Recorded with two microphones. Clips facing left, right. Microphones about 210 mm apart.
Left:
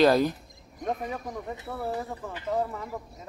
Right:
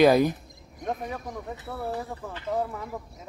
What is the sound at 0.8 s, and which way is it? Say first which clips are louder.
Speech: left 1 dB; 5° left (ahead or behind).